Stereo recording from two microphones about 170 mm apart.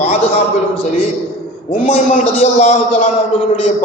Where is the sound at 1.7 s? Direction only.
40° left (ahead or behind).